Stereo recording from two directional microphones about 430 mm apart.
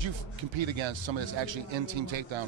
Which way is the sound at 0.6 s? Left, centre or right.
Right.